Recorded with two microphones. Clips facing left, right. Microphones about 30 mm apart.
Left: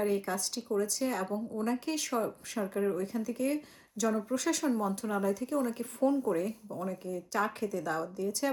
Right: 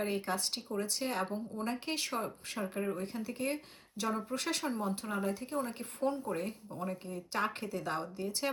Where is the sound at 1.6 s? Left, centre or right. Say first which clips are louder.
Left 3 dB; right.